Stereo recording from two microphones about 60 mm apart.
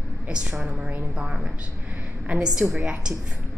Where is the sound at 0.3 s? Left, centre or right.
Centre.